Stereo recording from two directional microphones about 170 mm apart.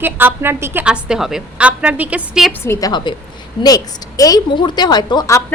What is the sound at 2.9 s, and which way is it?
Speech, 25° left (ahead or behind).